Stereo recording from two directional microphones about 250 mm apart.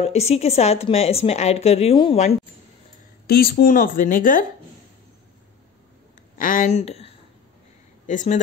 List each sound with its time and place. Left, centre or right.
0.0 s a woman's voice: left
3.3 s speech: left
6.3 s a woman's voice: left